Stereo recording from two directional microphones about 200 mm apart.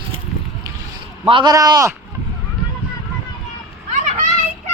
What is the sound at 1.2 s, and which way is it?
Speech, 25° right (ahead or behind).